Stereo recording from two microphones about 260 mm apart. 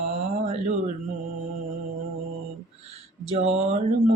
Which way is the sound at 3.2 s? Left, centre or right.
Right.